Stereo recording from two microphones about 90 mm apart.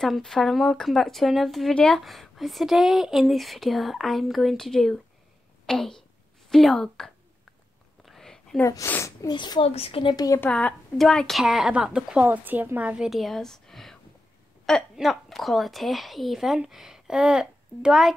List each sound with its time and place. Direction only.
0.0 s speech: 5° left (ahead or behind)
8.0 s a sound: 5° left (ahead or behind)
8.8 s speech: 30° left (ahead or behind)
9.3 s a woman's voice: 60° left (ahead or behind); by 10.1 s 90° left
10.1 s a woman's voice: 45° left (ahead or behind)
11.0 s speech: 5° left (ahead or behind)
12.3 s speech: 20° right (ahead or behind)